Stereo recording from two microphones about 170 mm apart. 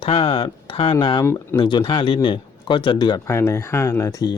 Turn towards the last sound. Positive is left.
turn(degrees=20)  # may be behind; listen again after turning